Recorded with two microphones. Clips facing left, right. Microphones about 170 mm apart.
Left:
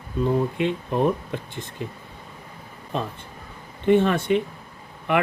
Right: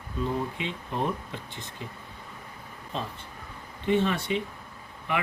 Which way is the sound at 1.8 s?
55° left (ahead or behind).